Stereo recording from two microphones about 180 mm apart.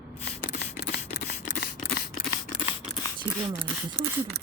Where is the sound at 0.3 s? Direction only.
65° left (ahead or behind).